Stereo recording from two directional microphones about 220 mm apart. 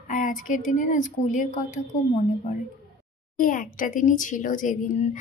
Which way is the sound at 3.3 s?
35° left (ahead or behind).